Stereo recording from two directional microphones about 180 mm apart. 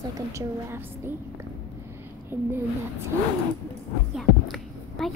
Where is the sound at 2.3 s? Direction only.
10° right (ahead or behind).